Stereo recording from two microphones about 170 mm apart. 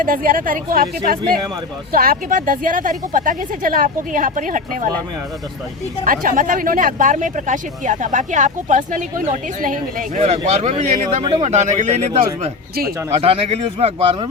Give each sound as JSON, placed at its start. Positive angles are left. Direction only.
{"t": 0.0, "sound": "speech", "side_deg": -55}
{"t": 6.1, "sound": "speech", "side_deg": -55}